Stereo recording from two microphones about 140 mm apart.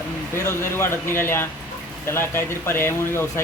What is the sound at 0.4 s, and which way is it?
A man's voice, 20° left (ahead or behind).